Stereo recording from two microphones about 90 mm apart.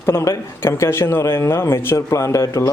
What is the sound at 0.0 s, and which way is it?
Speech, 30° left (ahead or behind).